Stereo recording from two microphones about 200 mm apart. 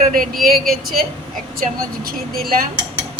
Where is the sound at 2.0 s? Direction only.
45° right (ahead or behind).